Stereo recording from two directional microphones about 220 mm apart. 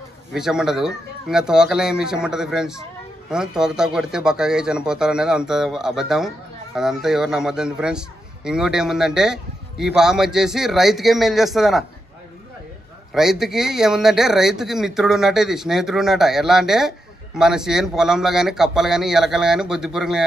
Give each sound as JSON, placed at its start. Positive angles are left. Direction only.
{"t": 0.3, "sound": "speech", "side_deg": 0}
{"t": 13.1, "sound": "speech", "side_deg": 0}